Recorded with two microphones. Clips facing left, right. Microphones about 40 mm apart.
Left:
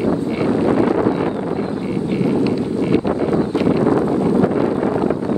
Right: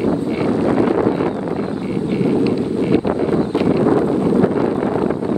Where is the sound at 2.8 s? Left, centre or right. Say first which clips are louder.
Even; centre.